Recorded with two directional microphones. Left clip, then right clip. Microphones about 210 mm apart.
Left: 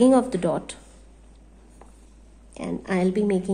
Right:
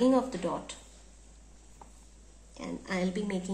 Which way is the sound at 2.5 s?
50° left (ahead or behind).